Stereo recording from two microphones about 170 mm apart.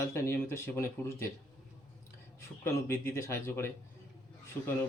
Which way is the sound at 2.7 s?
15° left (ahead or behind).